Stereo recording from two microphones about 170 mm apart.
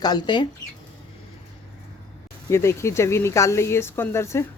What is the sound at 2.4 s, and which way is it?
Speech, 15° left (ahead or behind).